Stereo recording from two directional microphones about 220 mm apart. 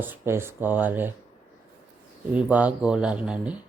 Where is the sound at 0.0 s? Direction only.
10° right (ahead or behind).